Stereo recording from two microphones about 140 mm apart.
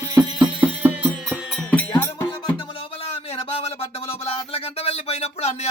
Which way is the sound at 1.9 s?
15° left (ahead or behind).